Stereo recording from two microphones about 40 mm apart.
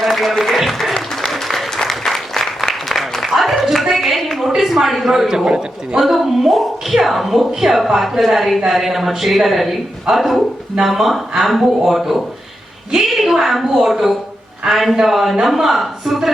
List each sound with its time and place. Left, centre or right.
0.0 s speech: centre
0.9 s applause: centre
3.6 s a sound: centre
5.5 s a man's voice: right
6.0 s a woman's voice: centre